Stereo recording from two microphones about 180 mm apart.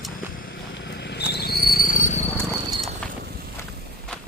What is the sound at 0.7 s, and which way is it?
Vehicle, 70° left (ahead or behind).